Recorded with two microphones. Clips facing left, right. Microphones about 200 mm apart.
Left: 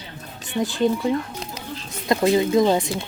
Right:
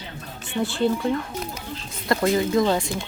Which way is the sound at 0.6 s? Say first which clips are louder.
Left 2 dB; 15° left (ahead or behind).